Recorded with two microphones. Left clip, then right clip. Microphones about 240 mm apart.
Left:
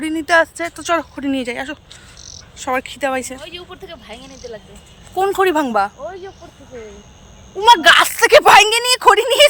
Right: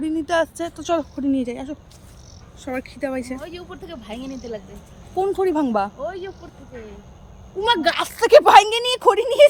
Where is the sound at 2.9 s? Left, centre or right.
Left.